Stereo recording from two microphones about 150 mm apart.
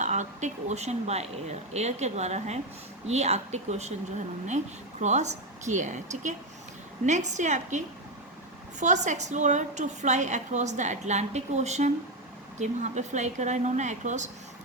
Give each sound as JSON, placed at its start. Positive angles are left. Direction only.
{"t": 0.0, "sound": "a woman's voice", "side_deg": -50}